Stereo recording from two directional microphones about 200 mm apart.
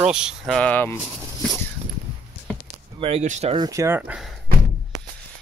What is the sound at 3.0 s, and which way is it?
Speech, 30° right (ahead or behind).